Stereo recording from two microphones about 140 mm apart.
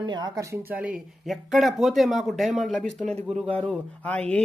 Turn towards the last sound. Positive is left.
turn(degrees=10)  # may be behind; listen again after turning